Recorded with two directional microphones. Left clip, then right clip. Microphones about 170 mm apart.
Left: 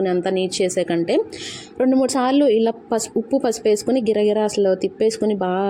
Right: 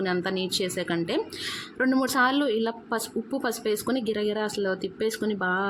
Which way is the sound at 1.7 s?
5° left (ahead or behind).